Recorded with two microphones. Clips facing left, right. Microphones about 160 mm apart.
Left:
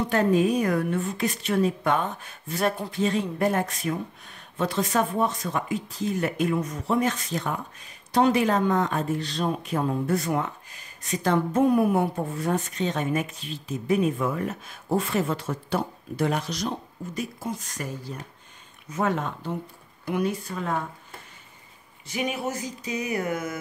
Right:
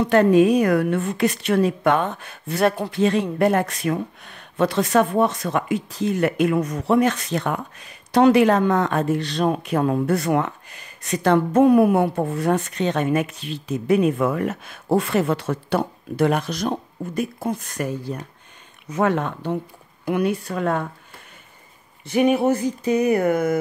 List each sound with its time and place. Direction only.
0.0 s a woman's voice: 70° right (ahead or behind)
22.0 s speech: 55° right (ahead or behind)